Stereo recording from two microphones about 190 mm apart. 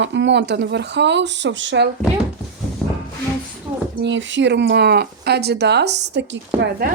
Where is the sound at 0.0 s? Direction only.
70° right (ahead or behind).